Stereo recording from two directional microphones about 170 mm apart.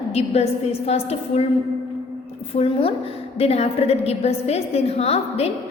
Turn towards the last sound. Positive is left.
turn(degrees=35)  # may be behind; listen again after turning